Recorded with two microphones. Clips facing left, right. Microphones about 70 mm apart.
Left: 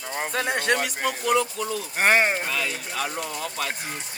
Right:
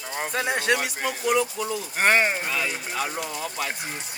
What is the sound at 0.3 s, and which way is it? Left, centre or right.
Speech, centre.